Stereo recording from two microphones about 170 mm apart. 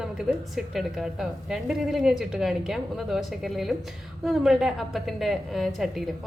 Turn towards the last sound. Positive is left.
turn(degrees=0)  # may be behind; listen again after turning